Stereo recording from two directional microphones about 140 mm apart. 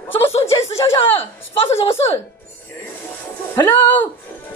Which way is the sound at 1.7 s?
50° left (ahead or behind).